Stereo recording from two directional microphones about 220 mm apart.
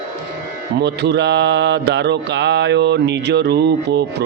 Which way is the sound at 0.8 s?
50° right (ahead or behind).